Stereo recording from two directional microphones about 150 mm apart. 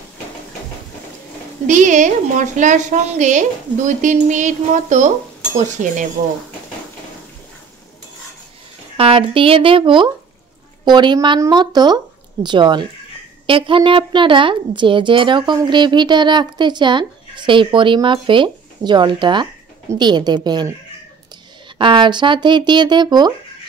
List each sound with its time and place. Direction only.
1.7 s a woman's voice: 55° right (ahead or behind)
8.9 s a woman's voice: 40° right (ahead or behind)
21.7 s a woman's voice: 30° right (ahead or behind)